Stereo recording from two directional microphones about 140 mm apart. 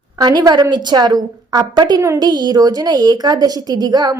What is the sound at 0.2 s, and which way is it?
A woman's voice, 30° right (ahead or behind).